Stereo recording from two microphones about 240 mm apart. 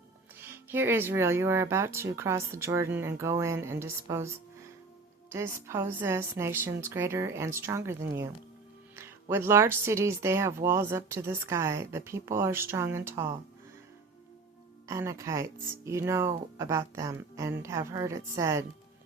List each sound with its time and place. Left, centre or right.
0.4 s speech: centre
5.3 s speech: centre
9.3 s speech: centre
14.8 s speech: centre